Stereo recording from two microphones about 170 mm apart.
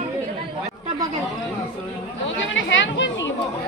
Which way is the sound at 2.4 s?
90° left.